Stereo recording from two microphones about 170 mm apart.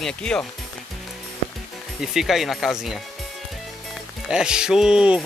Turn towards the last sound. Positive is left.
turn(degrees=-5)  # may be behind; listen again after turning